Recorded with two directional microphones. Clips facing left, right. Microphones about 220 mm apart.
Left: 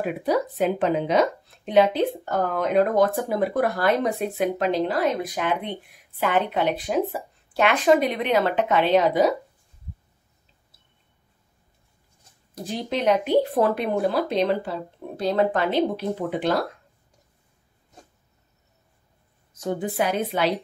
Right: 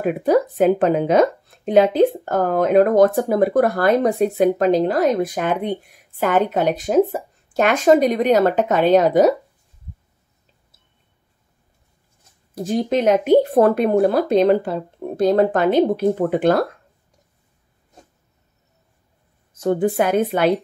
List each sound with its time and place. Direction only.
0.0 s speech: 50° right (ahead or behind)
12.6 s speech: 45° right (ahead or behind)
19.6 s speech: 55° right (ahead or behind)